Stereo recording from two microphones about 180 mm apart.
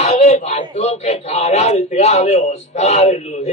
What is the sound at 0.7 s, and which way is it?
A man's voice, 35° left (ahead or behind).